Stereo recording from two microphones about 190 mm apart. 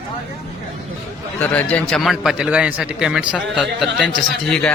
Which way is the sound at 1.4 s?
10° left (ahead or behind).